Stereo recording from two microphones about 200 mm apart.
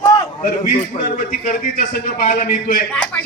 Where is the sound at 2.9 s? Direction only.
5° left (ahead or behind).